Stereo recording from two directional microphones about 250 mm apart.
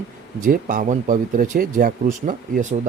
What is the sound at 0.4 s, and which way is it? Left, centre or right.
Speech, right.